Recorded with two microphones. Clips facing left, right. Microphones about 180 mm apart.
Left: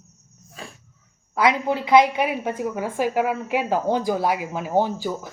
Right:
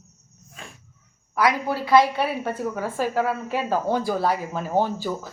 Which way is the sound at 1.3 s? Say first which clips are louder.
Left 2 dB; 20° left (ahead or behind).